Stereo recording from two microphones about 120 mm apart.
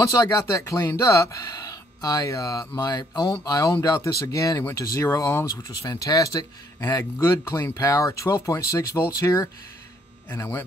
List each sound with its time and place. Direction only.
0.0 s speech: 25° left (ahead or behind)